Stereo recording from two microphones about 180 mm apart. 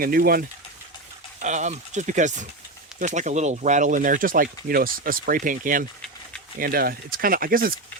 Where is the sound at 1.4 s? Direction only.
40° right (ahead or behind).